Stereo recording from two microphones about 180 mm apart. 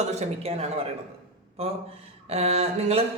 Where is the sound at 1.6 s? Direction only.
35° right (ahead or behind).